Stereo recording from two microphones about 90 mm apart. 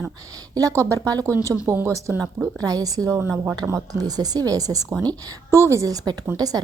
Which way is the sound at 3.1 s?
30° right (ahead or behind).